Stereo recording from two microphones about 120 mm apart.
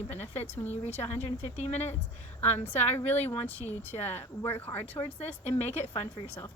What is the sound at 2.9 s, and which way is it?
Speech, 15° left (ahead or behind).